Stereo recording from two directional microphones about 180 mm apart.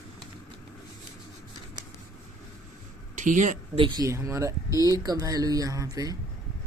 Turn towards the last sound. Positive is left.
turn(degrees=-20)  # may be behind; listen again after turning